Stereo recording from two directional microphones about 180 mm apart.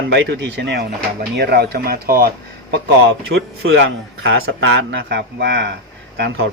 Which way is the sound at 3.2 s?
85° right.